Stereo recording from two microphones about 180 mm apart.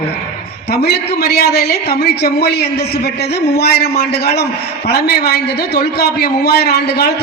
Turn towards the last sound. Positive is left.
turn(degrees=65)  # may be behind; listen again after turning